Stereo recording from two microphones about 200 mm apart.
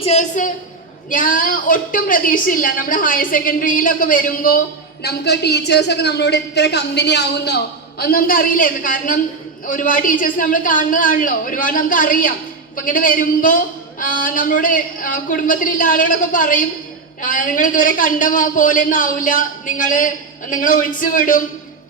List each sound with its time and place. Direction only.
0.0 s a man's voice: 35° left (ahead or behind)